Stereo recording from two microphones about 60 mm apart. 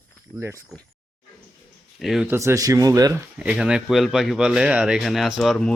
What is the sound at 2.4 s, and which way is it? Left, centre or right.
Speech, right.